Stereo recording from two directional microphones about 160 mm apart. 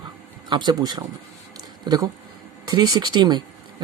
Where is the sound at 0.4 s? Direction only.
25° right (ahead or behind).